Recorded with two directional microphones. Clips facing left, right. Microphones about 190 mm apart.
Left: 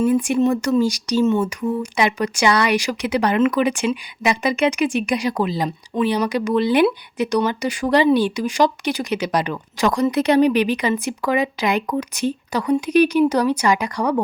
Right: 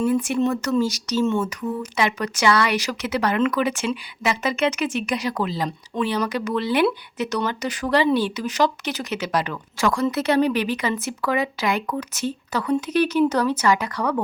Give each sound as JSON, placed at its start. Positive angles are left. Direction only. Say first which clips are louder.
{"t": 0.0, "sound": "speech", "louder": "left 3 dB", "side_deg": 15}